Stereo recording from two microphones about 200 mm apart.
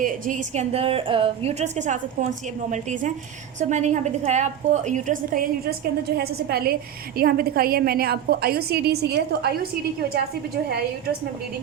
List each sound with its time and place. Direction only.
0.0 s a woman's voice: 40° right (ahead or behind); by 9.5 s 55° right (ahead or behind)